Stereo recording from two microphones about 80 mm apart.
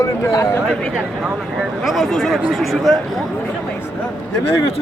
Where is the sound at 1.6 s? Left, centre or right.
Centre.